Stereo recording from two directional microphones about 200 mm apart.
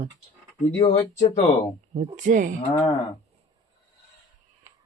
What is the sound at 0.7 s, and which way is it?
Speech, 20° left (ahead or behind).